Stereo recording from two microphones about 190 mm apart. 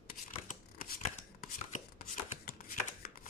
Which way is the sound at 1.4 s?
50° left (ahead or behind).